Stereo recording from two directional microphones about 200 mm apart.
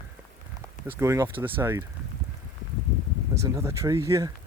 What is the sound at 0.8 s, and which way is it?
Speech, 10° right (ahead or behind).